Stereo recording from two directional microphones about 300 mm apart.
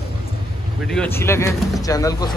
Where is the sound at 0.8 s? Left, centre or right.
Centre.